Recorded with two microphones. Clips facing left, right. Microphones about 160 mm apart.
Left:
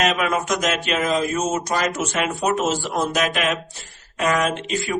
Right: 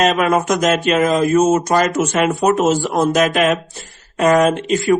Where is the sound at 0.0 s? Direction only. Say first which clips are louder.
Right 6 dB; 40° right (ahead or behind).